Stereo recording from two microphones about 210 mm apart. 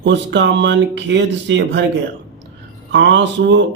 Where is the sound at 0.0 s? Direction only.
55° right (ahead or behind).